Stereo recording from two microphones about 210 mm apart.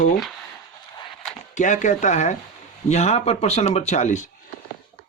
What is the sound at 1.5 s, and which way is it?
Speech, 35° left (ahead or behind).